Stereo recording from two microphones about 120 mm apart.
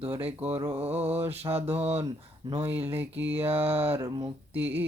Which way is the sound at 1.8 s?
60° right (ahead or behind).